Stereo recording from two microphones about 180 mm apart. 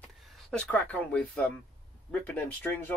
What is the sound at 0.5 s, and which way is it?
Speech, 5° left (ahead or behind).